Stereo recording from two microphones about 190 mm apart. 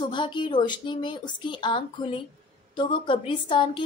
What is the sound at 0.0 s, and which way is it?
A woman's voice, 25° left (ahead or behind).